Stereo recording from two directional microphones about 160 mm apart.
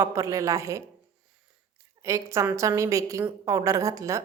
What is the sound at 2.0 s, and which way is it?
A woman's voice, 20° right (ahead or behind).